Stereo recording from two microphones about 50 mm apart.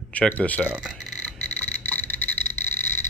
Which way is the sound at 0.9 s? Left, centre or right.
Centre.